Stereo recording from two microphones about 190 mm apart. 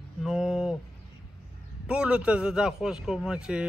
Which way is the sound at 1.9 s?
5° right (ahead or behind).